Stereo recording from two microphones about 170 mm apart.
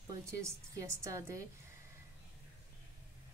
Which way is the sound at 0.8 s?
15° right (ahead or behind).